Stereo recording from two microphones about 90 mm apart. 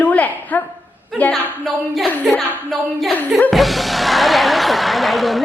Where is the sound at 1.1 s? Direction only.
Centre (ahead or behind).